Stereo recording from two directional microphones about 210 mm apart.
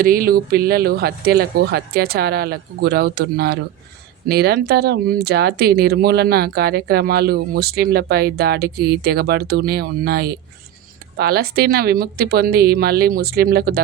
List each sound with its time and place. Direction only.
0.0 s speech: 45° right (ahead or behind)